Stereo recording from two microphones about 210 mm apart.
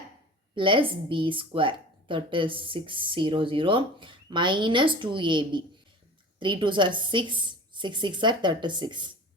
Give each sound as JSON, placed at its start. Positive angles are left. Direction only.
{"t": 0.5, "sound": "speech", "side_deg": -25}